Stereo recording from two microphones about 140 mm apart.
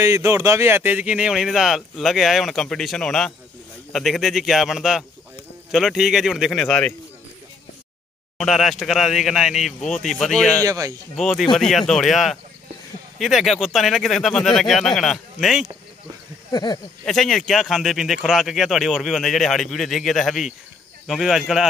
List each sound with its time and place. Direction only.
0.0 s speech: 20° right (ahead or behind); by 6.9 s 5° left (ahead or behind)
8.4 s speech: centre (ahead or behind)
10.6 s speech: 25° right (ahead or behind)
11.1 s speech: centre (ahead or behind)
16.5 s speech: 25° left (ahead or behind)
17.0 s speech: centre (ahead or behind)